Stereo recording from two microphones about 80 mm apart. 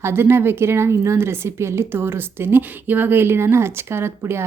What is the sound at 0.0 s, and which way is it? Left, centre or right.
A woman's voice, right.